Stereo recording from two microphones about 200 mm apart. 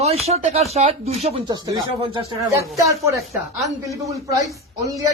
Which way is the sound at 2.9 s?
15° right (ahead or behind).